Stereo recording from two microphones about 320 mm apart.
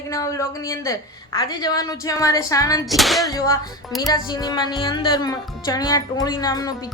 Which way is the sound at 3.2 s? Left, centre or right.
Centre.